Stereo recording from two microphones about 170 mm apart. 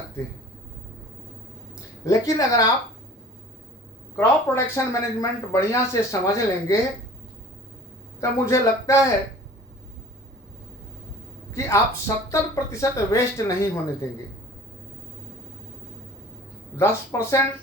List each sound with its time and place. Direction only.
2.0 s a woman's voice: 20° left (ahead or behind)
4.2 s speech: 15° left (ahead or behind)
8.2 s speech: 20° left (ahead or behind)
11.5 s speech: 15° left (ahead or behind)
16.7 s speech: 15° left (ahead or behind)